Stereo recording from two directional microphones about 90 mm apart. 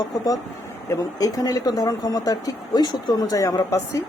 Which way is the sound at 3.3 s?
40° left (ahead or behind).